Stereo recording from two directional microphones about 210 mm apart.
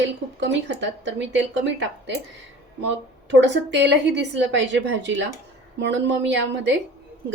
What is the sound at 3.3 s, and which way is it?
A woman's voice, 60° right (ahead or behind).